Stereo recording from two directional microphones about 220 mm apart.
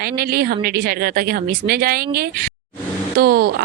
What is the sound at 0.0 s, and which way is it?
A woman's voice, 45° right (ahead or behind).